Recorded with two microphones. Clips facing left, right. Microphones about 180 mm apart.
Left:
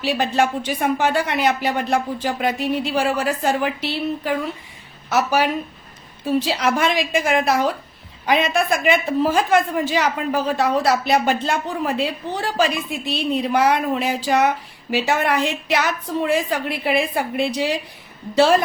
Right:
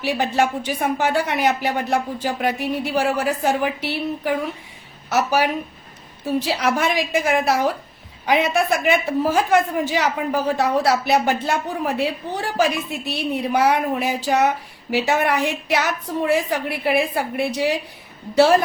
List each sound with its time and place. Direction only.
0.0 s a woman's voice: 10° right (ahead or behind)